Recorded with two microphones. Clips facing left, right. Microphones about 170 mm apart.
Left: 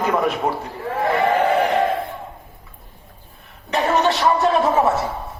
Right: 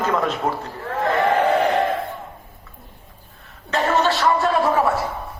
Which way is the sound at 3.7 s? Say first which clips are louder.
Left 1 dB; 15° left (ahead or behind).